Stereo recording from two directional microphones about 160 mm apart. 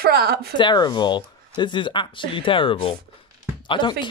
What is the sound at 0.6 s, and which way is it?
Speech, 25° left (ahead or behind).